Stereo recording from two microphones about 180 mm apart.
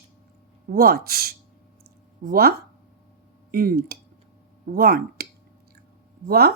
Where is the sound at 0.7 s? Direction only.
60° right (ahead or behind).